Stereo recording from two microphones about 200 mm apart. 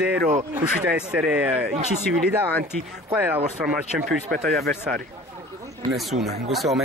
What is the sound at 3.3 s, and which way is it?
Speech, 40° right (ahead or behind).